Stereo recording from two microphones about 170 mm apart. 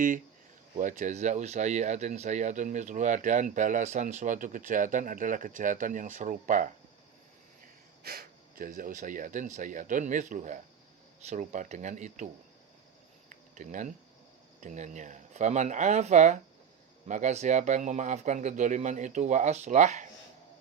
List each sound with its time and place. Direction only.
0.8 s speech: 50° right (ahead or behind)
8.0 s speech: 60° right (ahead or behind); by 12.3 s 45° right (ahead or behind)
13.3 s a sound: 50° right (ahead or behind)
14.6 s speech: 45° right (ahead or behind)